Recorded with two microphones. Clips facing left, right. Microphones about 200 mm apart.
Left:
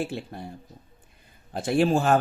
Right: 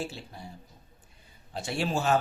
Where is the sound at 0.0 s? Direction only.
55° left (ahead or behind).